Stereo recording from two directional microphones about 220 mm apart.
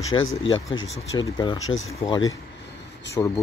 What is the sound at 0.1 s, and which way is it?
Speech, 15° left (ahead or behind).